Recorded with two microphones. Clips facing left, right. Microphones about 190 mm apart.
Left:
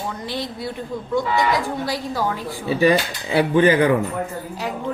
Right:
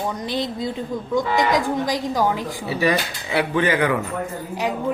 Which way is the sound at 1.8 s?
15° right (ahead or behind).